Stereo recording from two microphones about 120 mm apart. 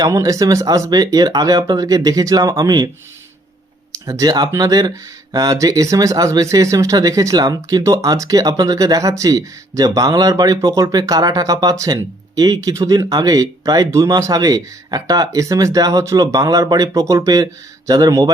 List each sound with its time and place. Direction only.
0.0 s speech: 25° right (ahead or behind)
4.0 s speech: 30° right (ahead or behind)